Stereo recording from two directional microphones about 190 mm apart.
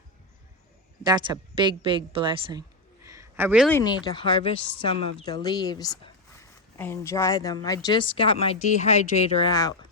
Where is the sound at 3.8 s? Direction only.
20° left (ahead or behind).